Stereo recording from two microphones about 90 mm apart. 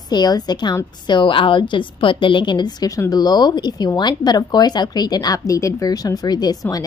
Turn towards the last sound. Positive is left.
turn(degrees=50)  # may be behind; listen again after turning